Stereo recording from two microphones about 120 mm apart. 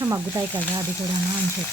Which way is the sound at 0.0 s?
25° right (ahead or behind).